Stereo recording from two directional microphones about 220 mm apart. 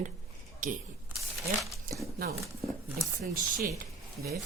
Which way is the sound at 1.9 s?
40° right (ahead or behind).